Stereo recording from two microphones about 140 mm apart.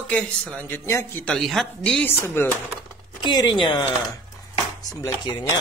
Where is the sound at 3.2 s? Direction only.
30° left (ahead or behind).